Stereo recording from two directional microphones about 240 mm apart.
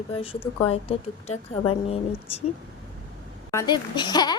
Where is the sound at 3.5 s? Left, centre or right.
Centre.